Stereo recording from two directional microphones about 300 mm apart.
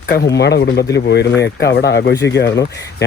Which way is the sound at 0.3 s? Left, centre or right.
Left.